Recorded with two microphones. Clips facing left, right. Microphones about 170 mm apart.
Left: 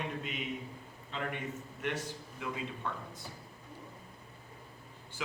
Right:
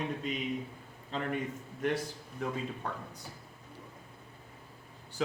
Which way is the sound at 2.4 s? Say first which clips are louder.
Right 4 dB; 40° right (ahead or behind).